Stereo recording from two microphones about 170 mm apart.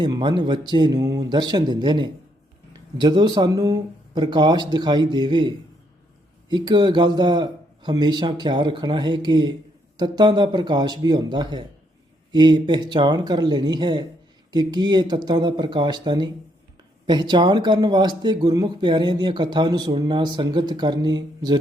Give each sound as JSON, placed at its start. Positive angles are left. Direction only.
{"t": 0.0, "sound": "speech", "side_deg": -25}